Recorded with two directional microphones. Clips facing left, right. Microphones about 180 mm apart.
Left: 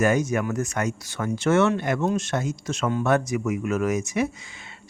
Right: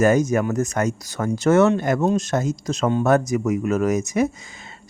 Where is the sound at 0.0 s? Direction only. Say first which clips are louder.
Right 4 dB; 40° right (ahead or behind).